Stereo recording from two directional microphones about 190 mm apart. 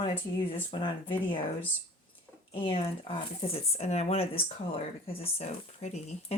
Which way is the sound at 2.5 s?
30° left (ahead or behind).